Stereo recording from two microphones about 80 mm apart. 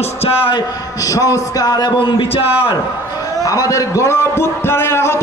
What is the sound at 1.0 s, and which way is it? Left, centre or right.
A man's voice, left.